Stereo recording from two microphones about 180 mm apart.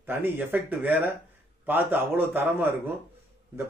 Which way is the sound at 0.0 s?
10° right (ahead or behind).